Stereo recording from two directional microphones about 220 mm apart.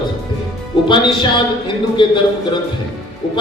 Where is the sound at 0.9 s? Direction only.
20° left (ahead or behind).